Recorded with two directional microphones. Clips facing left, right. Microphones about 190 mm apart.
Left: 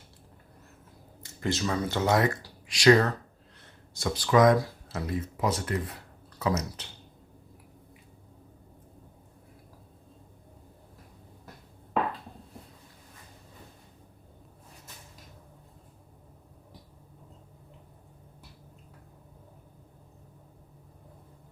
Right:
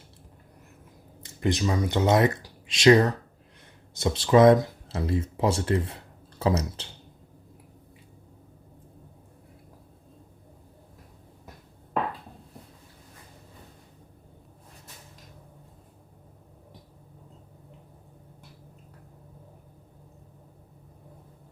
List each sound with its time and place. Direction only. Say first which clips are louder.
1.2 s speech: right 4 dB; 20° right (ahead or behind)